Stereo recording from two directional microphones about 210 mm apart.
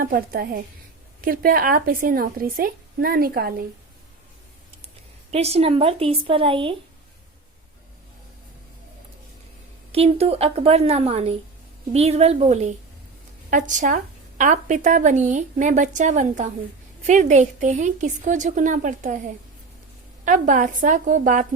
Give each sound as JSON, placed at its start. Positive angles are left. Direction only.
{"t": 0.0, "sound": "speech", "side_deg": -45}
{"t": 5.3, "sound": "a woman's voice", "side_deg": -30}
{"t": 9.9, "sound": "a woman's voice", "side_deg": -30}
{"t": 20.2, "sound": "a woman's voice", "side_deg": -40}